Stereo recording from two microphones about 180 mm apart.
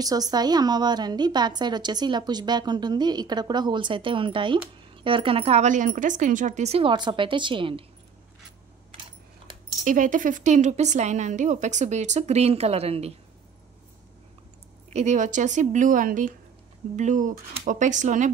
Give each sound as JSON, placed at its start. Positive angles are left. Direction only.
{"t": 0.0, "sound": "a woman's voice", "side_deg": -20}
{"t": 9.8, "sound": "speech", "side_deg": -45}
{"t": 14.9, "sound": "a woman's voice", "side_deg": -40}